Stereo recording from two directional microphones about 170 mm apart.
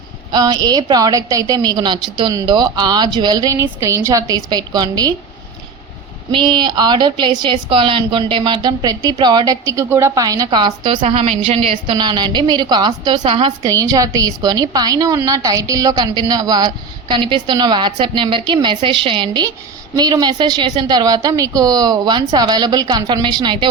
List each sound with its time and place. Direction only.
0.3 s a woman's voice: 25° right (ahead or behind)
6.3 s a woman's voice: 25° right (ahead or behind)
11.0 s a woman's voice: 35° right (ahead or behind)
13.6 s a woman's voice: 20° right (ahead or behind)